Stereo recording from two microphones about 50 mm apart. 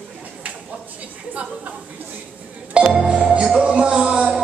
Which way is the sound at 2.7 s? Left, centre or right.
Centre.